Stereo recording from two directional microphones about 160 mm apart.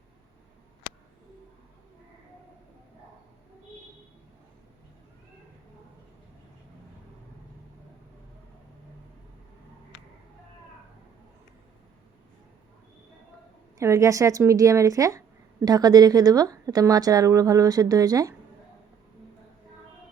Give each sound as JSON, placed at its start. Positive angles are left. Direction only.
{"t": 13.7, "sound": "a woman's voice", "side_deg": -20}